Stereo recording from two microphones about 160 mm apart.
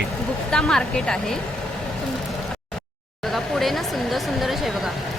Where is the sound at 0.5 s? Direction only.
5° left (ahead or behind).